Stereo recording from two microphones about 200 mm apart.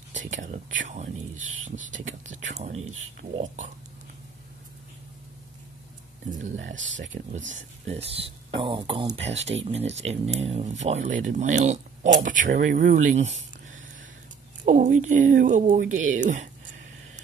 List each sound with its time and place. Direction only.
0.1 s speech: 40° right (ahead or behind)
2.3 s speech: 35° right (ahead or behind)
6.6 s speech: 70° right (ahead or behind)
7.5 s speech: 35° right (ahead or behind)
14.6 s speech: 40° right (ahead or behind)